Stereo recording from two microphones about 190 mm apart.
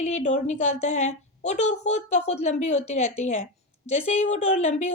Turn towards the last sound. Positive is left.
turn(degrees=40)  # may be behind; listen again after turning